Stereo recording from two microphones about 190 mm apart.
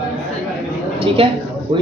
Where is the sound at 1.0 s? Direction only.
30° right (ahead or behind).